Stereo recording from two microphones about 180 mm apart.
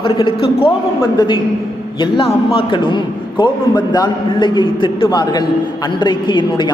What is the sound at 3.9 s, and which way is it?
A man's voice, 25° left (ahead or behind).